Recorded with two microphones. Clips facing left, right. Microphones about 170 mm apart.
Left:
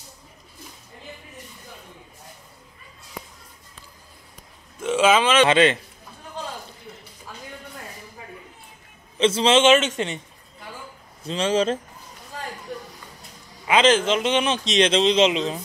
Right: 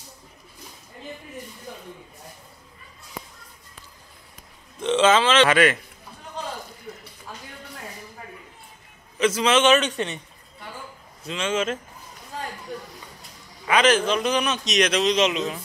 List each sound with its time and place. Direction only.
4.7 s speech: 10° left (ahead or behind)
5.5 s a man's voice: 25° left (ahead or behind)
9.2 s a man's voice: 30° left (ahead or behind)
11.2 s speech: 35° left (ahead or behind)
13.7 s a man's voice: 25° left (ahead or behind)